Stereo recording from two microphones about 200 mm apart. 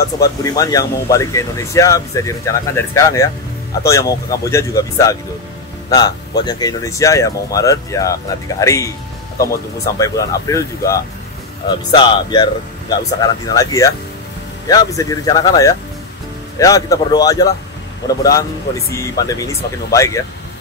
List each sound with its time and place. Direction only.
0.2 s speech: 20° left (ahead or behind)